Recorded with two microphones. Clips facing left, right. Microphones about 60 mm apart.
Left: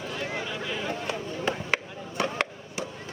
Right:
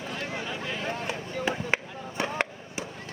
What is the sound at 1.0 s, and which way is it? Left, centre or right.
Chop, centre.